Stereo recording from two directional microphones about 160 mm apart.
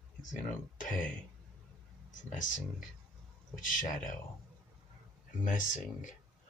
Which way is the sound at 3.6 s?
55° left (ahead or behind).